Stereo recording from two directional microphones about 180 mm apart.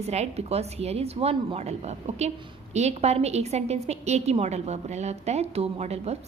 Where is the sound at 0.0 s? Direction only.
35° right (ahead or behind).